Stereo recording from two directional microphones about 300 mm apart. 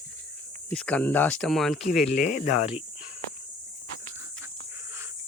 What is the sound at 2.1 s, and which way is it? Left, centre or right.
Speech, left.